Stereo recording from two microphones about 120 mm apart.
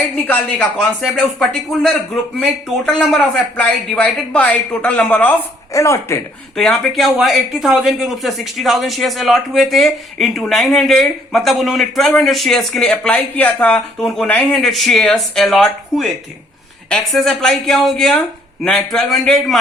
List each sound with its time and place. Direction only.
0.3 s speech: 10° left (ahead or behind)
5.7 s speech: 25° left (ahead or behind)
6.6 s speech: centre (ahead or behind)